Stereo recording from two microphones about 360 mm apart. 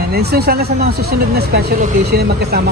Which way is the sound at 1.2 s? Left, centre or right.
Right.